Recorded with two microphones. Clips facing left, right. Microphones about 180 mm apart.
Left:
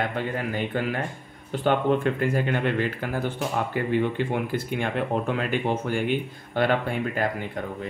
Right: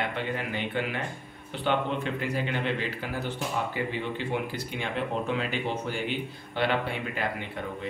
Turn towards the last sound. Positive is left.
turn(degrees=45)  # may be behind; listen again after turning